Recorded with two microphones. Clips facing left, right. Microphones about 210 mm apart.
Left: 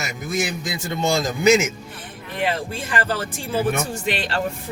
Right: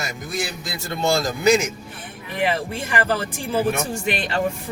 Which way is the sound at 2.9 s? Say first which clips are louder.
Right 2 dB; 15° right (ahead or behind).